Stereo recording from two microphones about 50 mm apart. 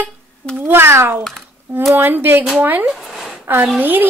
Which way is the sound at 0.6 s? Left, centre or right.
Right.